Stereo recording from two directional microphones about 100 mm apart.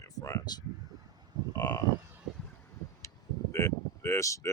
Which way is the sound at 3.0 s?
30° left (ahead or behind).